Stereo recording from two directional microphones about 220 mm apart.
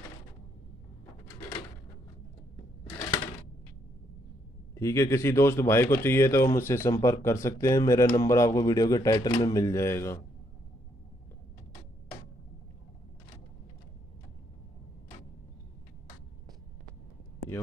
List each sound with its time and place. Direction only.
4.7 s speech: 15° left (ahead or behind)